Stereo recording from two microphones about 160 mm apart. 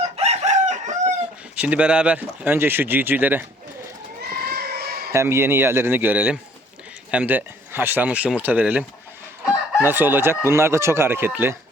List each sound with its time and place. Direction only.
0.0 s chicken: 40° right (ahead or behind)
1.5 s speech: 10° right (ahead or behind)
4.2 s a sound: 80° right
5.1 s speech: 15° right (ahead or behind)